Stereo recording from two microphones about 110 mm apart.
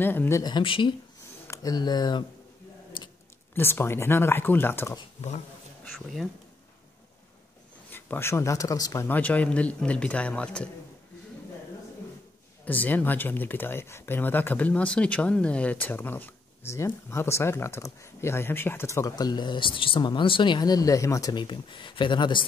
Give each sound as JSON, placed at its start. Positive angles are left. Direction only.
{"t": 0.0, "sound": "speech", "side_deg": 20}
{"t": 0.4, "sound": "speech", "side_deg": 40}
{"t": 1.5, "sound": "speech", "side_deg": 35}
{"t": 3.5, "sound": "speech", "side_deg": 20}
{"t": 5.9, "sound": "speech", "side_deg": 0}
{"t": 7.9, "sound": "speech", "side_deg": 20}
{"t": 9.0, "sound": "a man's voice", "side_deg": 15}
{"t": 12.6, "sound": "speech", "side_deg": 15}